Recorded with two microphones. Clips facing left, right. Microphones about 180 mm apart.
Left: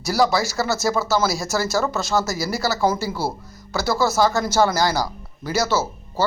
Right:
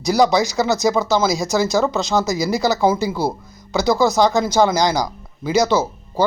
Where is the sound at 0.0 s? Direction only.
20° right (ahead or behind).